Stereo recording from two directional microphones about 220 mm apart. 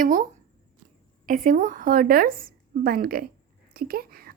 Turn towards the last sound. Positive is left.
turn(degrees=-45)  # may be behind; listen again after turning